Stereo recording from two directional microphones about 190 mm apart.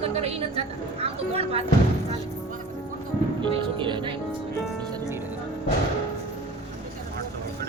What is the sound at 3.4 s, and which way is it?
Speech, 25° right (ahead or behind).